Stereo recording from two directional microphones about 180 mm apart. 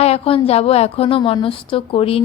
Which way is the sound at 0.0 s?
35° left (ahead or behind).